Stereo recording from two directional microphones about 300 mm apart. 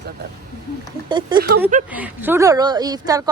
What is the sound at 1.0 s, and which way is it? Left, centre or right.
A woman's voice, centre.